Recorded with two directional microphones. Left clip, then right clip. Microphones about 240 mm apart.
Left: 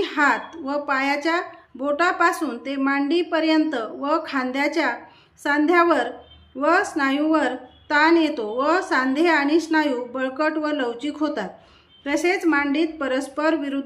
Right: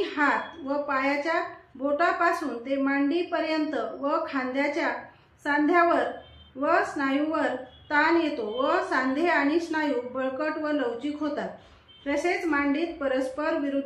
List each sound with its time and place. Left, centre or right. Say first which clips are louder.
0.0 s a woman's voice: left 5 dB; left